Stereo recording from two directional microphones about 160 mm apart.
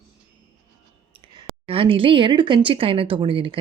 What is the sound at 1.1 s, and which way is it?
A woman's voice, 35° right (ahead or behind).